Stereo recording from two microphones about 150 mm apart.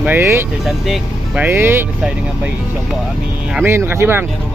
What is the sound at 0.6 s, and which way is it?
Speech, centre (ahead or behind).